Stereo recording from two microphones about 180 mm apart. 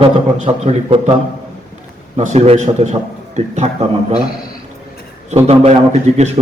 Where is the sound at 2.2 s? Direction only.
35° right (ahead or behind).